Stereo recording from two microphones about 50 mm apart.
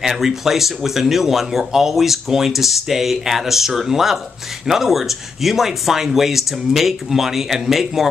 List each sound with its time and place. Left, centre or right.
0.0 s speech: centre